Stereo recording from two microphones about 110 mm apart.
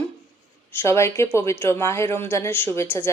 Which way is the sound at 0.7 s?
25° left (ahead or behind).